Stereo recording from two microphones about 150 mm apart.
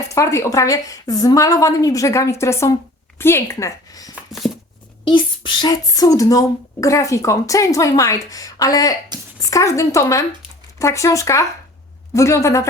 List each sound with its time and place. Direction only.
0.1 s a woman's voice: 20° left (ahead or behind)
4.1 s a sound: centre (ahead or behind)
5.0 s speech: 30° left (ahead or behind)